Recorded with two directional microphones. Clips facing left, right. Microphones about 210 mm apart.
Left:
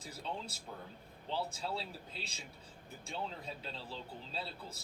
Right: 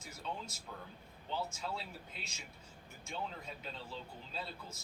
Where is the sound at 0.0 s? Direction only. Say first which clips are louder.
Left 1 dB; 30° left (ahead or behind).